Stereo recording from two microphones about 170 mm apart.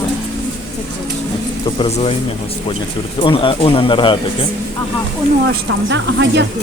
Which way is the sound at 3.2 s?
30° left (ahead or behind).